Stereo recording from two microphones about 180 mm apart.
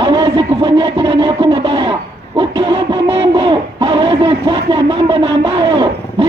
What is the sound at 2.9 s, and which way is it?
Speech, 25° right (ahead or behind).